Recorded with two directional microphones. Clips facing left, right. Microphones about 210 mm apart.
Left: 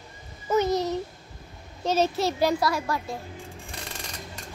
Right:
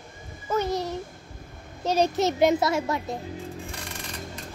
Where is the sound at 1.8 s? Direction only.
15° right (ahead or behind).